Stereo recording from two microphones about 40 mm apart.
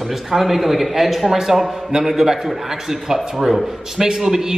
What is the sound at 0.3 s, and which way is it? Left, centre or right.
A man's voice, centre.